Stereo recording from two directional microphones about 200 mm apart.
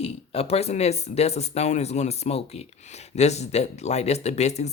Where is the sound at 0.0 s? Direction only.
30° left (ahead or behind).